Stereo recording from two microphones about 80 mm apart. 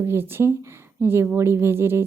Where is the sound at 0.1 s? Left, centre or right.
Right.